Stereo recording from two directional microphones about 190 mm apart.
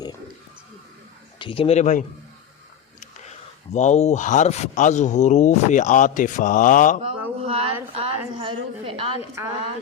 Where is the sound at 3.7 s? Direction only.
35° left (ahead or behind).